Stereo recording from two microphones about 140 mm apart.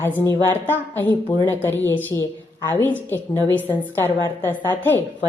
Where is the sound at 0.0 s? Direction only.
15° left (ahead or behind).